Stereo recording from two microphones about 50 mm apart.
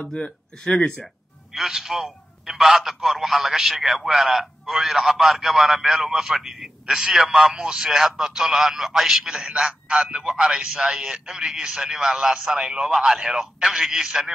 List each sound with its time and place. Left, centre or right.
0.0 s speech: left
1.5 s a man's voice: centre